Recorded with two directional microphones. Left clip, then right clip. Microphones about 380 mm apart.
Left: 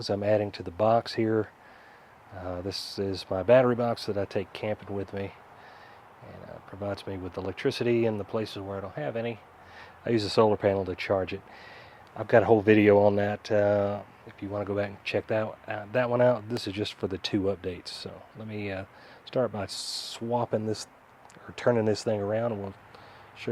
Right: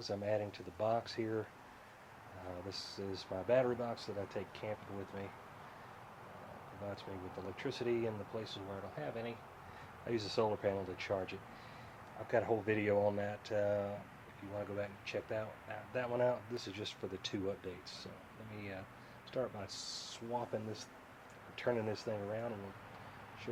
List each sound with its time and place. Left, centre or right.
0.0 s speech: left
2.6 s speech: left
6.8 s speech: left